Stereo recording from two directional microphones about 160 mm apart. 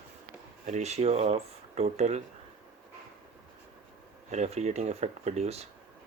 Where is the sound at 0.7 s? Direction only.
45° right (ahead or behind).